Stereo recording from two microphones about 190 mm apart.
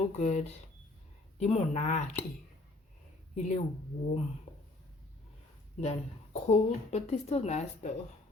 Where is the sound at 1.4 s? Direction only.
35° left (ahead or behind).